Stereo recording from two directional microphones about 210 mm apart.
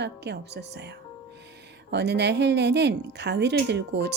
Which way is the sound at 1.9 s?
55° right (ahead or behind).